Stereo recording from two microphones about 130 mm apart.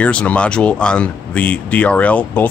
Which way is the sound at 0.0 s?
10° left (ahead or behind).